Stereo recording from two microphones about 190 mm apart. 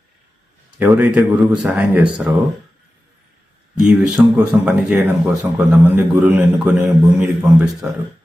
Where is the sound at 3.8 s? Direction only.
5° right (ahead or behind).